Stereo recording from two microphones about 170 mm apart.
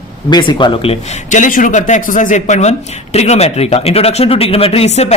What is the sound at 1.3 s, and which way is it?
Speech, 50° left (ahead or behind).